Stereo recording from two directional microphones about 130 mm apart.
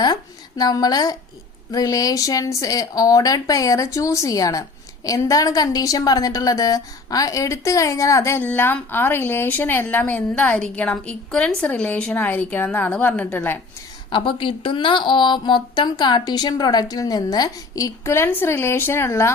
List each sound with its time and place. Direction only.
0.0 s a woman's voice: 30° left (ahead or behind); by 13.6 s 15° left (ahead or behind)
14.1 s speech: 40° left (ahead or behind); by 19.3 s 20° left (ahead or behind)